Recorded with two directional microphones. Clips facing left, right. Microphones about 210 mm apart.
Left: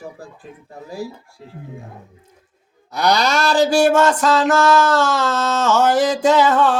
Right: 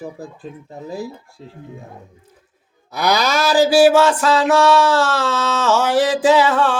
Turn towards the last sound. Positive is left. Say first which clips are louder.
# even
turn(degrees=0)  # may be behind; listen again after turning